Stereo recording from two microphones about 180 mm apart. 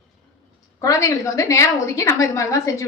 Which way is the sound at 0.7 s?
15° left (ahead or behind).